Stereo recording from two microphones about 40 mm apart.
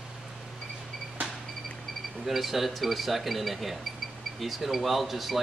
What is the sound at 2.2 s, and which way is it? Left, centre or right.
Speech, centre.